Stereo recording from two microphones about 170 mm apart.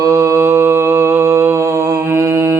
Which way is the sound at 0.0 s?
20° right (ahead or behind).